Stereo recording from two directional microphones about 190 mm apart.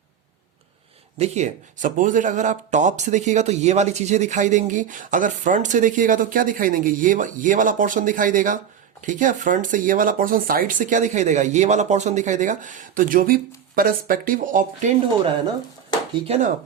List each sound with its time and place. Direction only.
1.2 s speech: 35° right (ahead or behind)
16.2 s speech: 30° right (ahead or behind)